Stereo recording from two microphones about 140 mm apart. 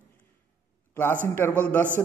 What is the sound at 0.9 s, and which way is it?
Speech, 10° left (ahead or behind).